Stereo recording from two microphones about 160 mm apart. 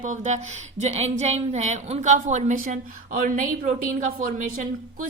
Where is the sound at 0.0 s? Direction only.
50° right (ahead or behind).